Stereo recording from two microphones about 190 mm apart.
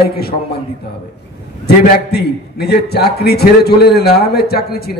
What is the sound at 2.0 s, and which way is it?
A man's voice, 55° left (ahead or behind).